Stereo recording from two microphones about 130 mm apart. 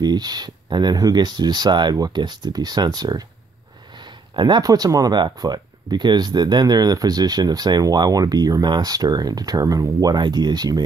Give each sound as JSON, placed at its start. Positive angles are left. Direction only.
{"t": 0.0, "sound": "speech", "side_deg": -30}
{"t": 4.4, "sound": "speech", "side_deg": -35}